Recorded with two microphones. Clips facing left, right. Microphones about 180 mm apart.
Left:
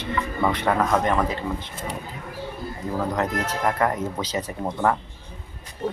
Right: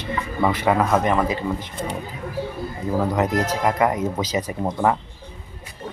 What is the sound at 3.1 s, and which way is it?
Speech, 10° right (ahead or behind).